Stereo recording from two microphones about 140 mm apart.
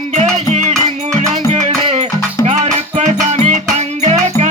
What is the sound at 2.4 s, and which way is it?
Music, 55° right (ahead or behind).